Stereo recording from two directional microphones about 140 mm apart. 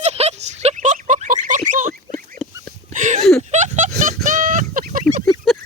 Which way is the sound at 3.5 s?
60° right (ahead or behind).